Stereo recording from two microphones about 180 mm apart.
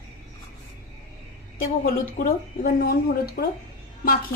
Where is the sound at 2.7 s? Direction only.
55° left (ahead or behind).